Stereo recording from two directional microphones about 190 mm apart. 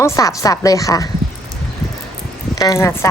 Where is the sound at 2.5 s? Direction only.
15° left (ahead or behind).